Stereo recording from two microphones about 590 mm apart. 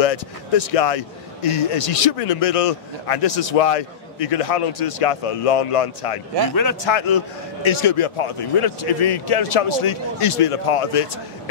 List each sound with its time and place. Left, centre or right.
0.0 s a man's voice: left
6.5 s a man's voice: left
6.9 s a man's voice: left